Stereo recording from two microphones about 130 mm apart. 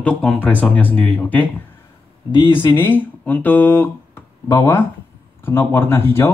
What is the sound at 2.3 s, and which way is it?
Speech, 40° left (ahead or behind).